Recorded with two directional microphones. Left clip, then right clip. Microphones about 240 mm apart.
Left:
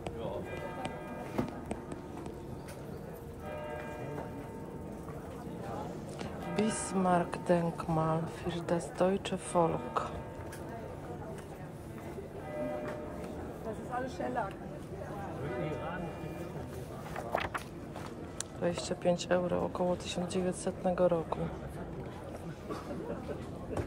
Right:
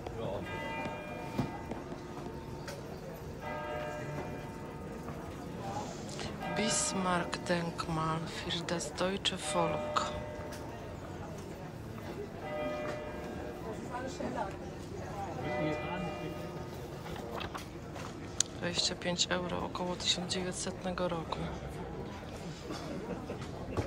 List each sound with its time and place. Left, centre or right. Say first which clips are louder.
6.6 s a woman's voice: left 1 dB; centre
18.4 s a woman's voice: right 2 dB; centre